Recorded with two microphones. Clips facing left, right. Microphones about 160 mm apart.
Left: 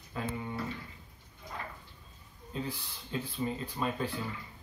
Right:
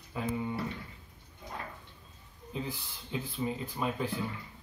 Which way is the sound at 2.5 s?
15° right (ahead or behind).